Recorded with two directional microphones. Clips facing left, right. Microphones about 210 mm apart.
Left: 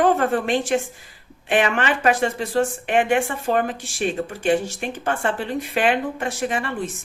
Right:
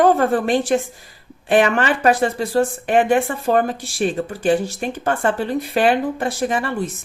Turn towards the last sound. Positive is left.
turn(degrees=-40)  # may be behind; listen again after turning